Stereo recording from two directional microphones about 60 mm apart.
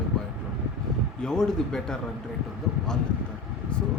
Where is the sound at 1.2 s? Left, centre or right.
Centre.